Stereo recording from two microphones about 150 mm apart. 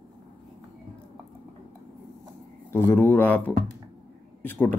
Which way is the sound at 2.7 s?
15° left (ahead or behind).